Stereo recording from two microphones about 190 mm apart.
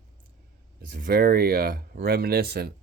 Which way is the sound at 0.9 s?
50° right (ahead or behind).